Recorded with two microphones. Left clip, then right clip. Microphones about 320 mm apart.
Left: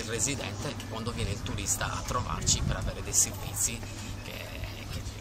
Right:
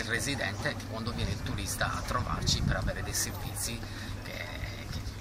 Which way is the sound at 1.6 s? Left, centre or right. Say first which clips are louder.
Even; centre.